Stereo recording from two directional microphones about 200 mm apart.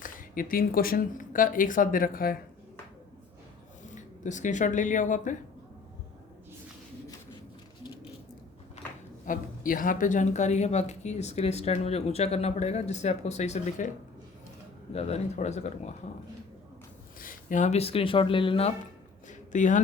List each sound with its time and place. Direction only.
0.0 s speech: 45° left (ahead or behind)
3.8 s speech: 40° left (ahead or behind)
9.2 s a woman's voice: 40° left (ahead or behind)
14.9 s a woman's voice: 30° left (ahead or behind)
17.2 s speech: 40° left (ahead or behind)
19.3 s a sound: 40° left (ahead or behind)